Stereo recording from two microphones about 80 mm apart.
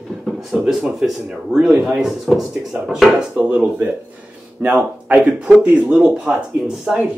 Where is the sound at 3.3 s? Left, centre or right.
Centre.